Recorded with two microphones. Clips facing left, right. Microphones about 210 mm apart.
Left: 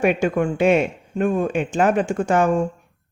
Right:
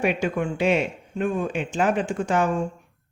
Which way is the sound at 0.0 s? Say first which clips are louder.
Left 5 dB; 50° left (ahead or behind).